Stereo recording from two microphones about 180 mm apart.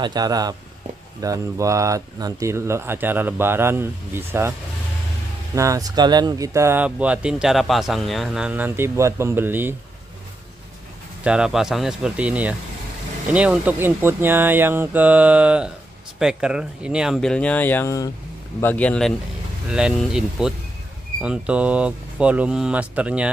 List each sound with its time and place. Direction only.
0.0 s speech: 20° right (ahead or behind)
11.2 s speech: 5° right (ahead or behind)